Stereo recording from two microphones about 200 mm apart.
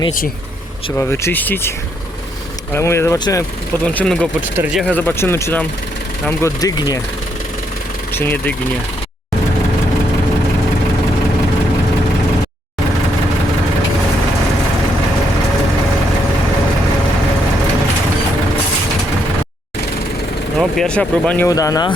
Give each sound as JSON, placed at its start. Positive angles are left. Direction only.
{"t": 0.9, "sound": "speech", "side_deg": 10}
{"t": 2.7, "sound": "speech", "side_deg": 10}
{"t": 3.8, "sound": "speech", "side_deg": 5}
{"t": 4.9, "sound": "speech", "side_deg": 10}
{"t": 8.1, "sound": "speech", "side_deg": 10}
{"t": 20.6, "sound": "speech", "side_deg": 5}